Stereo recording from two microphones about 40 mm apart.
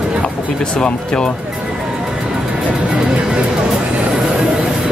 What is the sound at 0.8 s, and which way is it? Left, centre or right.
Speech, left.